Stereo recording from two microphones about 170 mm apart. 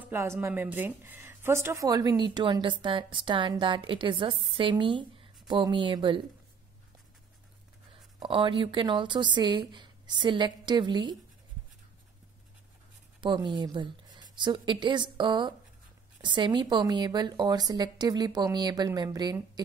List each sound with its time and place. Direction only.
0.0 s speech: 15° right (ahead or behind)
7.9 s speech: 30° right (ahead or behind)
13.2 s speech: 25° right (ahead or behind)